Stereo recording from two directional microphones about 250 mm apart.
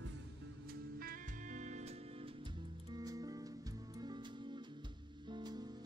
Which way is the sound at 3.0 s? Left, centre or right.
Centre.